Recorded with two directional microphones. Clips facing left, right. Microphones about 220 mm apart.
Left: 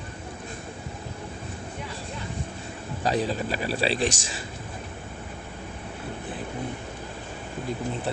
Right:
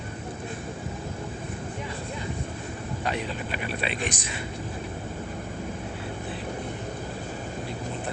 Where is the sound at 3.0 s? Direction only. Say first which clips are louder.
Left 6 dB; 35° left (ahead or behind).